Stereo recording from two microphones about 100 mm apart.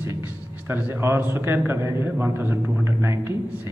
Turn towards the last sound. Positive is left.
turn(degrees=-25)  # may be behind; listen again after turning